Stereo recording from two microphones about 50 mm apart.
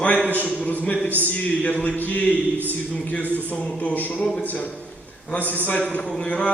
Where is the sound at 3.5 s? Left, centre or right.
Left.